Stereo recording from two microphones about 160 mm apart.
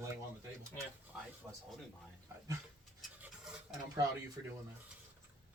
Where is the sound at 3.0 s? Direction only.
5° right (ahead or behind).